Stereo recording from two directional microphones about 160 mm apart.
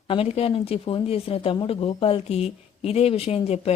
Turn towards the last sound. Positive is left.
turn(degrees=40)  # may be behind; listen again after turning